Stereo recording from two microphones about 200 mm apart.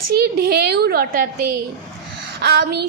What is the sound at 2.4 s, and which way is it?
Child singing, 55° right (ahead or behind).